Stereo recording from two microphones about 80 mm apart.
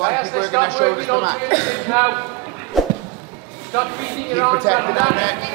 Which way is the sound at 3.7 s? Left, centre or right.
Centre.